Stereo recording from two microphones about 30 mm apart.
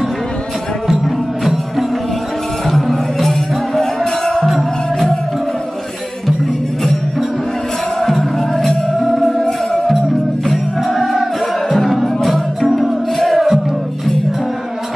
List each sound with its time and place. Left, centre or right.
1.0 s music: centre
4.0 s music: left
8.0 s music: centre